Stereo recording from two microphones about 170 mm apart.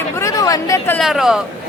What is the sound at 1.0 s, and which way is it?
Speech, centre (ahead or behind).